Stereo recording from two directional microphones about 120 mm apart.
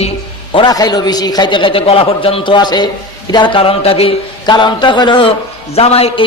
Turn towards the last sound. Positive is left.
turn(degrees=55)  # may be behind; listen again after turning